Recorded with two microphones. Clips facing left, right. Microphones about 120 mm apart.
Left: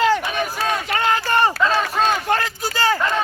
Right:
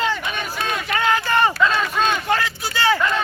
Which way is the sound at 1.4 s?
35° left (ahead or behind).